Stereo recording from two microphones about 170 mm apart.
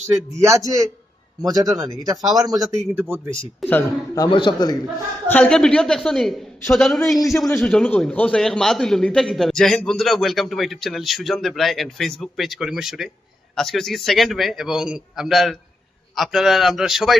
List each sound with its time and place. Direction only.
0.4 s speech: 20° right (ahead or behind)
3.7 s a man's voice: 15° left (ahead or behind)
5.3 s a man's voice: 5° left (ahead or behind)